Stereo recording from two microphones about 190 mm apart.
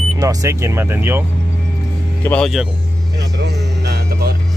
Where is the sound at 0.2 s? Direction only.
15° right (ahead or behind).